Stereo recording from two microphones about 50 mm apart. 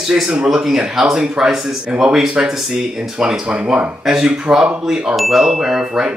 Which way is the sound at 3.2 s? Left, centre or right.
Centre.